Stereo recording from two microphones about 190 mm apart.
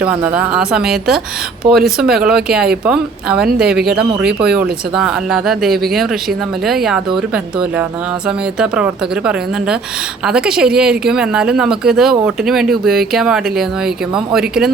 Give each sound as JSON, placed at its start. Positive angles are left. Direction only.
{"t": 0.0, "sound": "speech", "side_deg": -5}
{"t": 1.6, "sound": "speech", "side_deg": -25}
{"t": 2.0, "sound": "speech", "side_deg": -5}
{"t": 4.5, "sound": "speech", "side_deg": -5}
{"t": 8.5, "sound": "speech", "side_deg": -5}